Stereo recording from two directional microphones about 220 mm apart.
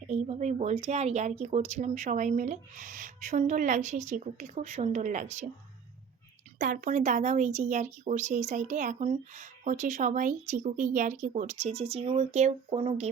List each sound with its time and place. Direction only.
0.1 s a woman's voice: 30° right (ahead or behind)
6.6 s a woman's voice: 35° right (ahead or behind)